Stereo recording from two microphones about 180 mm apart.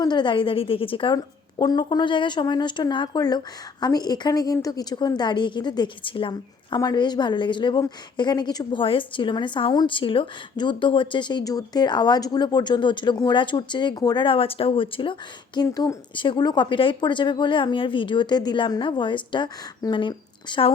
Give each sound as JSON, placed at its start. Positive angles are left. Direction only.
{"t": 0.0, "sound": "a woman's voice", "side_deg": 25}